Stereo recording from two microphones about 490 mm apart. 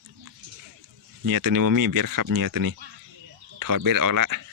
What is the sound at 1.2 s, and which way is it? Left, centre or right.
Speech, right.